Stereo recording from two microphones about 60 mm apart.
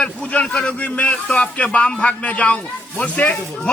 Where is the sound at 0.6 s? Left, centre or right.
Left.